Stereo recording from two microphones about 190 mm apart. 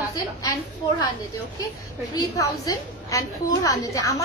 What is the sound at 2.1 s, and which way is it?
A woman's voice, 20° left (ahead or behind).